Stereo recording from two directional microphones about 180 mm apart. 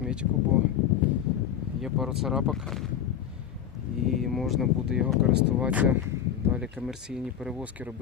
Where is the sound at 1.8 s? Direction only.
Centre (ahead or behind).